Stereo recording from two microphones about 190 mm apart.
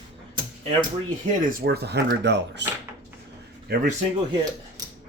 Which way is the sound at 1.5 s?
55° right (ahead or behind).